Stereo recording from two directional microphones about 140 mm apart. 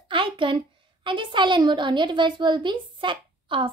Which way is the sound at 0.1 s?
35° right (ahead or behind).